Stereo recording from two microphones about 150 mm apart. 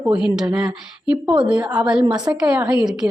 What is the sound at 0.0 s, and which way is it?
Speech, 5° right (ahead or behind).